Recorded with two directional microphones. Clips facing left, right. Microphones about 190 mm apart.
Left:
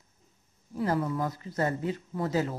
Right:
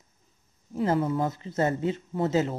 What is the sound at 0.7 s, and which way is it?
Speech, 25° right (ahead or behind).